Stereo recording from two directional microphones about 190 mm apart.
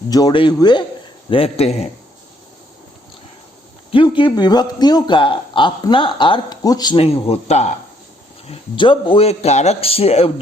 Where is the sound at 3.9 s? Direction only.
25° left (ahead or behind).